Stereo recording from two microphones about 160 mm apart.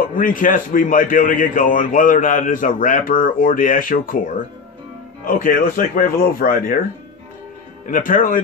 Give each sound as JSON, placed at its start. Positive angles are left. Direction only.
{"t": 0.1, "sound": "a man's voice", "side_deg": 60}
{"t": 5.2, "sound": "a man's voice", "side_deg": 60}
{"t": 7.8, "sound": "a man's voice", "side_deg": 60}